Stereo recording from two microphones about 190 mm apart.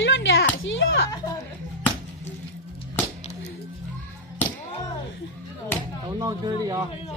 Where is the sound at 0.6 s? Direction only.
90° left.